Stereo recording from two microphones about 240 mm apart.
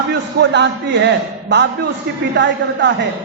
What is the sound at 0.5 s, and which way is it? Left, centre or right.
A man's voice, right.